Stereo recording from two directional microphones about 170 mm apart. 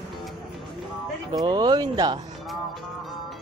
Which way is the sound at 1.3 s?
25° right (ahead or behind).